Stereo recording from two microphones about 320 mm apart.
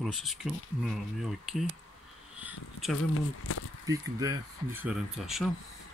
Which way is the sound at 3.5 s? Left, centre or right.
Left.